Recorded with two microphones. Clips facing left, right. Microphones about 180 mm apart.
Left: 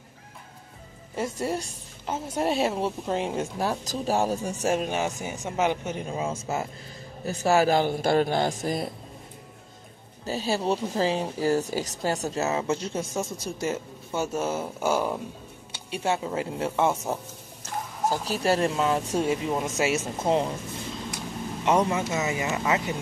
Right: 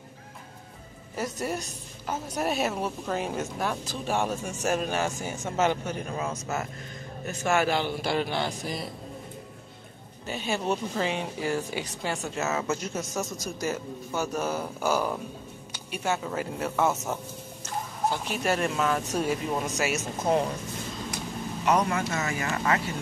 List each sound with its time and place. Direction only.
1.1 s a woman's voice: 25° left (ahead or behind); by 8.9 s 50° left (ahead or behind)
10.2 s a woman's voice: 35° left (ahead or behind)
21.6 s a woman's voice: 25° left (ahead or behind)